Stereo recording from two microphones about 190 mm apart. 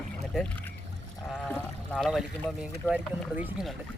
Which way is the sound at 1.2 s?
5° left (ahead or behind).